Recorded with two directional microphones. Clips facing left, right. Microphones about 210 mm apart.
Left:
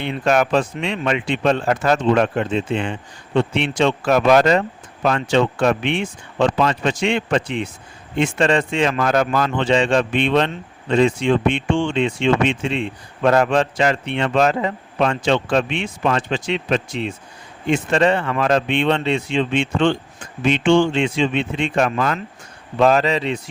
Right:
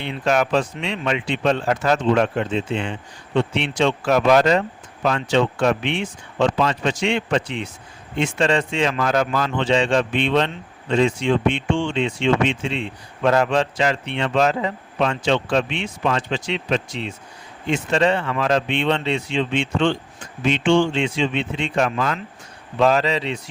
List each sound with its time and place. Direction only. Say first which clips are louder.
0.0 s speech: left 2 dB; 50° left (ahead or behind)